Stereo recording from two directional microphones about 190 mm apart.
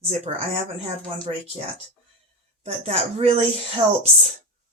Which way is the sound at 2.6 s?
30° right (ahead or behind).